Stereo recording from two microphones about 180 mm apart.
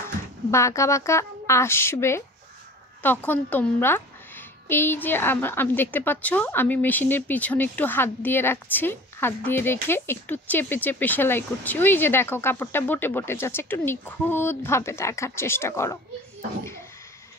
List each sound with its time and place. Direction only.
0.5 s a woman's voice: 15° left (ahead or behind)